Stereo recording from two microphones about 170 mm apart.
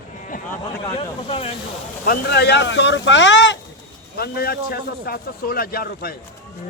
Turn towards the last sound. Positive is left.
turn(degrees=60)  # may be behind; listen again after turning